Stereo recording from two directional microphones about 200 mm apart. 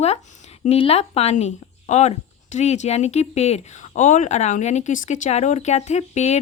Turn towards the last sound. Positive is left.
turn(degrees=35)  # may be behind; listen again after turning